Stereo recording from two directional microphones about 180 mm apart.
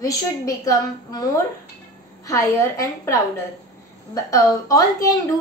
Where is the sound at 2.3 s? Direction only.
15° left (ahead or behind).